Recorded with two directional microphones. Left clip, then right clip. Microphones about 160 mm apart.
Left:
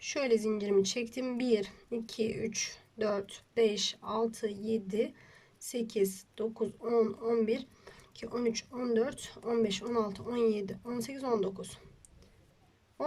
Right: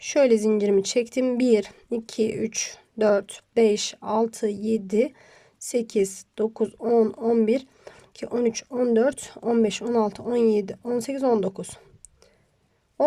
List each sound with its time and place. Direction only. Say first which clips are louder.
0.0 s speech: right 11 dB; 45° right (ahead or behind)